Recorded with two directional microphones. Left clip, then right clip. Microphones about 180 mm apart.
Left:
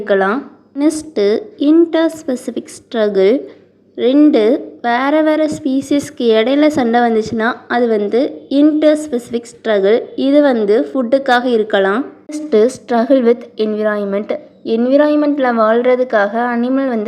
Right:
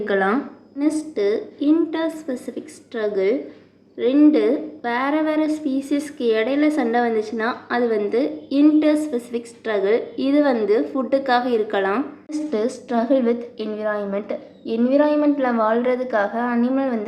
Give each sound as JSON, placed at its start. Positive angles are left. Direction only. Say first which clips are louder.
{"t": 0.0, "sound": "a woman's voice", "louder": "left 6 dB", "side_deg": 30}
{"t": 0.8, "sound": "a woman's voice", "louder": "left 7 dB", "side_deg": 45}